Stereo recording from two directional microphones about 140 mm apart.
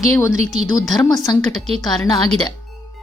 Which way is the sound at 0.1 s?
20° left (ahead or behind).